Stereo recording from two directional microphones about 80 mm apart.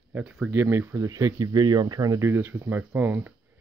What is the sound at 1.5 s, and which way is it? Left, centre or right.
Speech, right.